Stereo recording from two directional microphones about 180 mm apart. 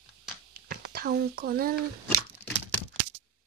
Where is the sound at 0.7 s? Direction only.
55° right (ahead or behind).